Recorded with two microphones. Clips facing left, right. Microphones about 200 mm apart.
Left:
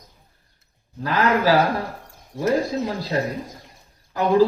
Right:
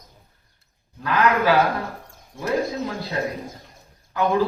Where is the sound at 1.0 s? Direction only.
35° left (ahead or behind).